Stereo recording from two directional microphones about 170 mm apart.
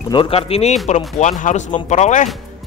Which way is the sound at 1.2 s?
45° left (ahead or behind).